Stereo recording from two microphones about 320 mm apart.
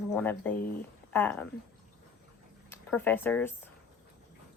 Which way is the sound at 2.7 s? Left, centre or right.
Centre.